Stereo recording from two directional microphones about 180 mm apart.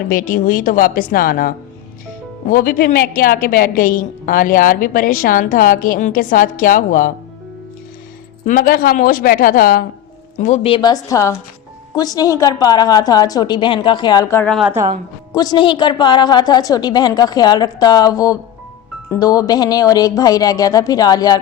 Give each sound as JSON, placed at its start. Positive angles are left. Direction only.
{"t": 0.1, "sound": "a woman's voice", "side_deg": 50}
{"t": 8.4, "sound": "a woman's voice", "side_deg": 55}